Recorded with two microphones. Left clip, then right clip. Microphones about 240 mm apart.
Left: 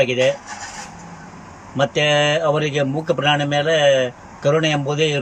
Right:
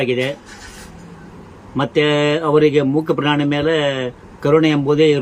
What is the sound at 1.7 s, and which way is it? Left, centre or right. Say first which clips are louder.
Speech: right 1 dB; centre.